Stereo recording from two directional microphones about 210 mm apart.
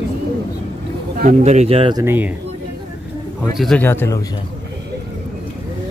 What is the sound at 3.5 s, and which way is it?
Speech, 5° left (ahead or behind).